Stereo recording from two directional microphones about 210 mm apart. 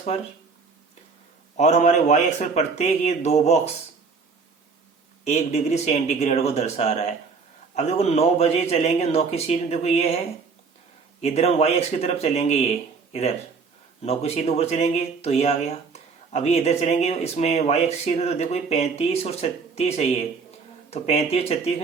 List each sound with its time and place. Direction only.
1.5 s speech: 35° left (ahead or behind)
5.2 s speech: 30° left (ahead or behind)
11.2 s speech: 30° left (ahead or behind)
14.0 s speech: 30° left (ahead or behind)